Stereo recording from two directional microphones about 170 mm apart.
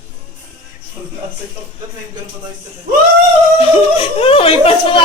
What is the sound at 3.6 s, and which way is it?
Speech, 35° left (ahead or behind).